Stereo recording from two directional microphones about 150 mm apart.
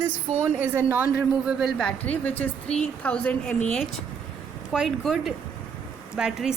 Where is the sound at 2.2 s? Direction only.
10° left (ahead or behind).